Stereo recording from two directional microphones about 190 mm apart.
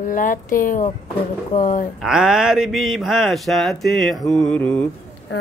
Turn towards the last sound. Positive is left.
turn(degrees=5)  # may be behind; listen again after turning